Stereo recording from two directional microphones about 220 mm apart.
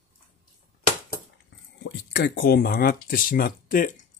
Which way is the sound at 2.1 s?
45° left (ahead or behind).